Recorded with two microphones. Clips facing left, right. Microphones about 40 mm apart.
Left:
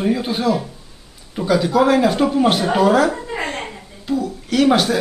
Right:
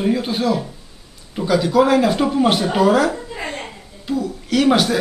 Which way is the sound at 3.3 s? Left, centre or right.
Left.